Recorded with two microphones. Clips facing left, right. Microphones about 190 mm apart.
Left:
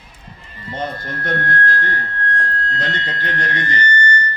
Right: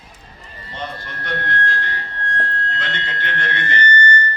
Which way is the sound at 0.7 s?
45° left (ahead or behind).